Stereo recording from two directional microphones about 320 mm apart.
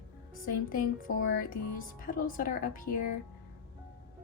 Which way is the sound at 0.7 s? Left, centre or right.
Left.